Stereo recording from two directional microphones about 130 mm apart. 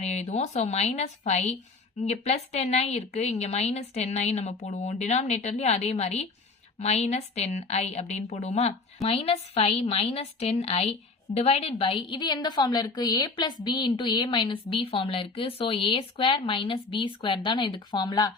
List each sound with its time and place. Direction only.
0.0 s a woman's voice: 60° left (ahead or behind); by 18.3 s 30° left (ahead or behind)